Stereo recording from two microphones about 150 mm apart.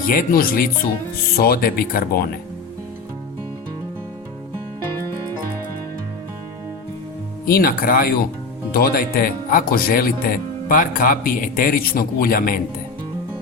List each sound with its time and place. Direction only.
0.0 s speech: 65° left (ahead or behind)
1.4 s speech: 85° left
7.4 s speech: 75° left (ahead or behind)
8.7 s speech: 90° left; by 12.5 s 70° left (ahead or behind)